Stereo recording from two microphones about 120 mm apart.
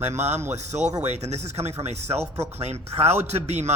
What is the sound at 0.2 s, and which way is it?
A man's voice, 70° right (ahead or behind).